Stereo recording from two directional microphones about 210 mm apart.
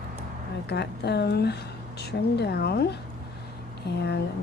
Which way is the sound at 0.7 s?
50° left (ahead or behind).